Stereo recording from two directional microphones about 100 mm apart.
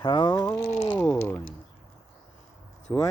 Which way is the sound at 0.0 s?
50° left (ahead or behind).